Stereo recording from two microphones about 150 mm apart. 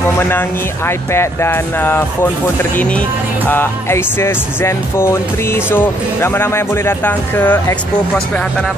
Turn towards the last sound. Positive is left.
turn(degrees=15)  # may be behind; listen again after turning